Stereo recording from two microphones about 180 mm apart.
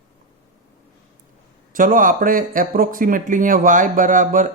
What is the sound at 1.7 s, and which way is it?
Speech, 50° right (ahead or behind).